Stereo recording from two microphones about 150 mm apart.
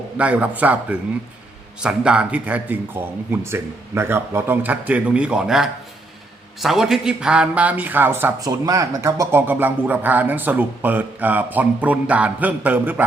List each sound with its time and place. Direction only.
0.2 s speech: 10° right (ahead or behind)
8.4 s speech: 25° right (ahead or behind)